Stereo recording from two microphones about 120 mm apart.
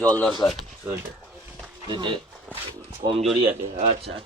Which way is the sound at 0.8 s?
20° right (ahead or behind).